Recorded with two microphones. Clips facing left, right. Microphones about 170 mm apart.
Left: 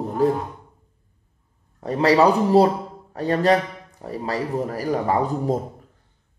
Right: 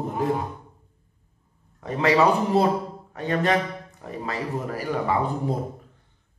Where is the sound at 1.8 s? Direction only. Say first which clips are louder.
Left 3 dB; 35° left (ahead or behind).